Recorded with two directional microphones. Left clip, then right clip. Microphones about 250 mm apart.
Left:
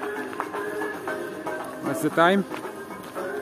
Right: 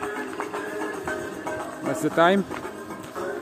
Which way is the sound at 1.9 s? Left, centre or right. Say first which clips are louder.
Even; centre.